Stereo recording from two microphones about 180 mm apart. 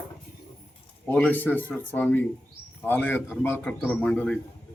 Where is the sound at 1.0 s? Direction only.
10° left (ahead or behind).